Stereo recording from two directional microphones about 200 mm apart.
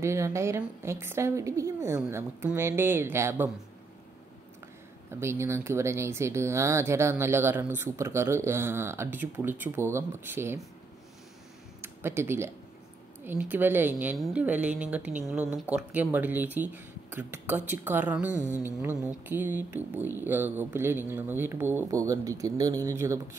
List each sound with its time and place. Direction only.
0.0 s speech: 15° right (ahead or behind)
5.1 s speech: 15° right (ahead or behind)
11.8 s speech: 10° right (ahead or behind)